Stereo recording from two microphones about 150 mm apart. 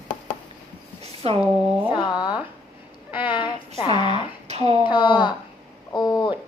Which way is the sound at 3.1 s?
10° right (ahead or behind).